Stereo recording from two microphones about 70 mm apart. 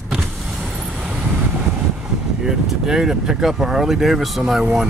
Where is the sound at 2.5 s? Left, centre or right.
Centre.